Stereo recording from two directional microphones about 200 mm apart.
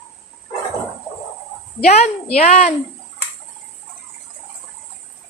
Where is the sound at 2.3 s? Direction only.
35° left (ahead or behind).